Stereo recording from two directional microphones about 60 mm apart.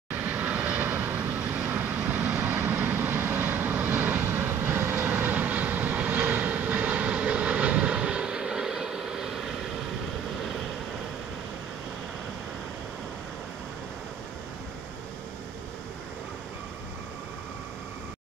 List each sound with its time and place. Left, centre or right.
0.1 s vehicle: right; by 9.3 s centre